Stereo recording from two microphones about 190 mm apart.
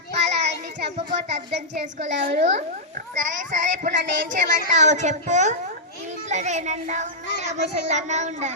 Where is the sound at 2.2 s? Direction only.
35° right (ahead or behind).